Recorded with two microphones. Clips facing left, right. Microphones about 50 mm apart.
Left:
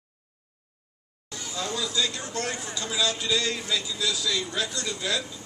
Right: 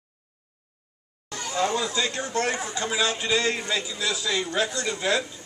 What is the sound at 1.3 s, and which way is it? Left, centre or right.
Speech, right.